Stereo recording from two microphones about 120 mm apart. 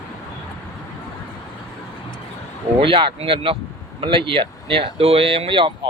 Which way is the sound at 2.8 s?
45° right (ahead or behind).